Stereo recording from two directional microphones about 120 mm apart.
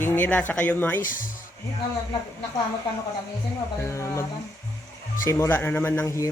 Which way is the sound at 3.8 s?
25° left (ahead or behind).